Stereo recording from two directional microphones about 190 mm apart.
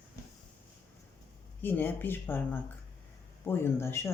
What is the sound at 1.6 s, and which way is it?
Speech, 10° left (ahead or behind).